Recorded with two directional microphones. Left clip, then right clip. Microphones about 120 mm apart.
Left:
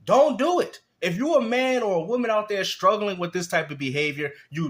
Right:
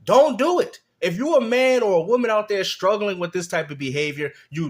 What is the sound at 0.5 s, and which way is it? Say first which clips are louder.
Speech: right 2 dB; 25° right (ahead or behind).